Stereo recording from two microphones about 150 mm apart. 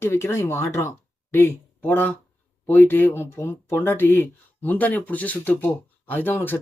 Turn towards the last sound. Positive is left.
turn(degrees=15)  # may be behind; listen again after turning